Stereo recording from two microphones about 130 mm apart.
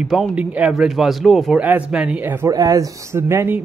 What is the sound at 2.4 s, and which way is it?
Speech, 25° right (ahead or behind).